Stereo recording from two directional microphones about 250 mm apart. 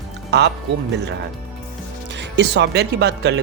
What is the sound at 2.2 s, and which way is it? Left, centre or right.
Speech, right.